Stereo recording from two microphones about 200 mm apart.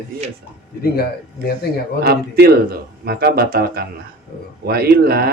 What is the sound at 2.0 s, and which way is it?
Speech, 50° right (ahead or behind).